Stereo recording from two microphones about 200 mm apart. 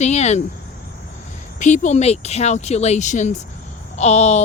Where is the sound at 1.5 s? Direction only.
40° left (ahead or behind).